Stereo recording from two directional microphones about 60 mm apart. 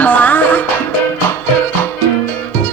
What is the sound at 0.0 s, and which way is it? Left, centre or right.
Music, left.